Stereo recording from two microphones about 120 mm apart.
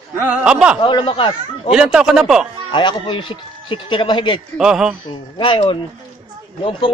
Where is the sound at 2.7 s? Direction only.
40° left (ahead or behind).